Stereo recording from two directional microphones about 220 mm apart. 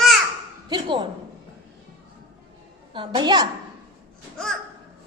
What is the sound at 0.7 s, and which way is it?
Speech, 20° right (ahead or behind).